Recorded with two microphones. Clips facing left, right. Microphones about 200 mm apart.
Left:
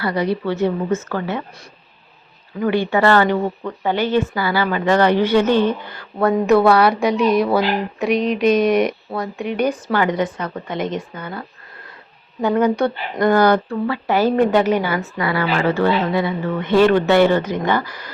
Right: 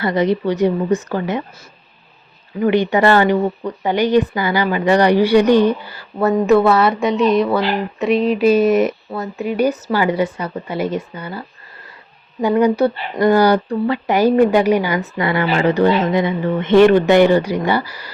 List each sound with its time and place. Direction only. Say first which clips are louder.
0.0 s speech: right 4 dB; 20° right (ahead or behind)
2.6 s speech: right 3 dB; 20° right (ahead or behind)